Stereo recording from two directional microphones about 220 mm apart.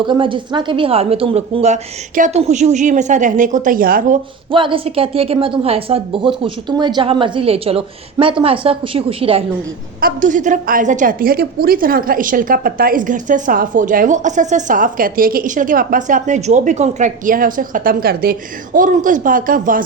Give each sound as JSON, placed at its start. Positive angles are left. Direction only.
{"t": 0.0, "sound": "a woman's voice", "side_deg": -20}
{"t": 4.5, "sound": "a woman's voice", "side_deg": -25}
{"t": 10.0, "sound": "a woman's voice", "side_deg": -35}